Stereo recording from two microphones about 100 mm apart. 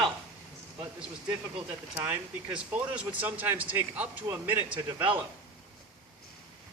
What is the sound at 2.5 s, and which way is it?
Speech, 15° right (ahead or behind).